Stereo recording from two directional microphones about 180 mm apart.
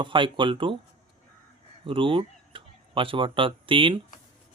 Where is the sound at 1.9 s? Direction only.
30° right (ahead or behind).